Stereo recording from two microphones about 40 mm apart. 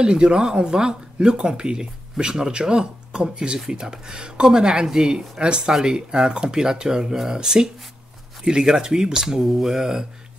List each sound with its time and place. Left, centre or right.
0.0 s speech: right